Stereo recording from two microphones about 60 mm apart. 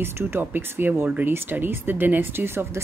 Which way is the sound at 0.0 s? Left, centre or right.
Right.